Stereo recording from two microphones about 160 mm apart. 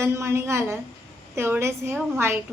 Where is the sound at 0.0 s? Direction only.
15° right (ahead or behind).